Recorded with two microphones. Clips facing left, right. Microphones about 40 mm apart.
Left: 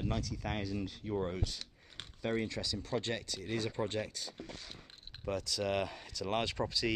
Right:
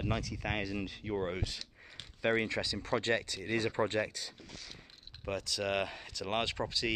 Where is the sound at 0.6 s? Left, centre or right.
Right.